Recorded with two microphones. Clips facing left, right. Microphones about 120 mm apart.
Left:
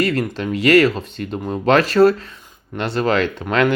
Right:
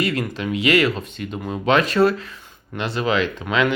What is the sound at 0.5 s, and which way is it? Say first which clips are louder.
Speech: left 5 dB; 45° left (ahead or behind).